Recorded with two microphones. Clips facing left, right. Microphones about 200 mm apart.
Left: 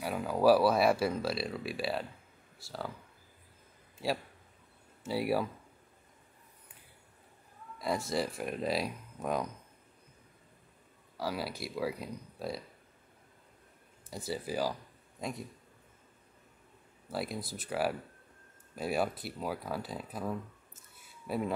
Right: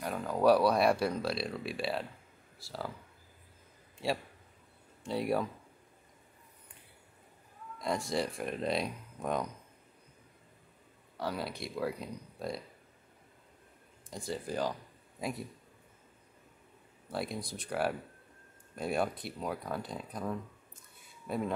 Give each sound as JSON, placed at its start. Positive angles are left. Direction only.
{"t": 0.0, "sound": "speech", "side_deg": 5}
{"t": 5.0, "sound": "speech", "side_deg": 5}
{"t": 7.8, "sound": "speech", "side_deg": 0}
{"t": 11.1, "sound": "speech", "side_deg": 5}
{"t": 14.1, "sound": "speech", "side_deg": 5}
{"t": 17.1, "sound": "speech", "side_deg": 0}